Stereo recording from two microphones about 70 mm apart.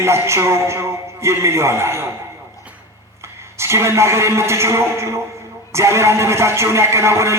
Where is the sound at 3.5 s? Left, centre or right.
Right.